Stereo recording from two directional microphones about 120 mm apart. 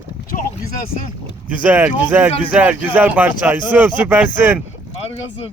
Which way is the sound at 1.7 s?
15° right (ahead or behind).